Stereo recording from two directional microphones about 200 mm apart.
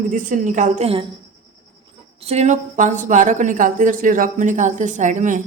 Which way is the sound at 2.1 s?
30° right (ahead or behind).